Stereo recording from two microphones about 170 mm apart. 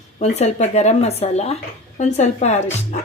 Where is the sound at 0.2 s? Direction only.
40° left (ahead or behind).